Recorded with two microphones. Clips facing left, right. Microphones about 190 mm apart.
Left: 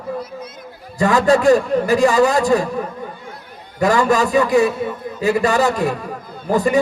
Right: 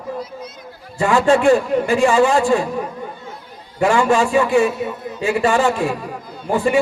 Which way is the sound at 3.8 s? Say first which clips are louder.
Even; 40° left (ahead or behind).